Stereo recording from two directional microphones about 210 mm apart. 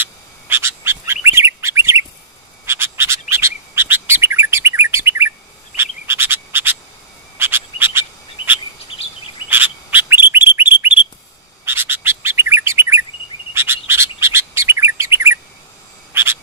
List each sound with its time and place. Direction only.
0.0 s bird: 10° right (ahead or behind)
5.8 s frog: 10° right (ahead or behind)
8.4 s bird: 25° left (ahead or behind)
9.5 s bird: 10° right (ahead or behind)
13.5 s chirp: 10° right (ahead or behind)
16.1 s a sound: 10° right (ahead or behind)